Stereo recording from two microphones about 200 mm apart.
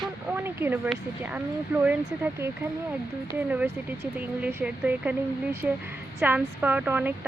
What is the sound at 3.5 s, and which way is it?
Speech, 5° right (ahead or behind).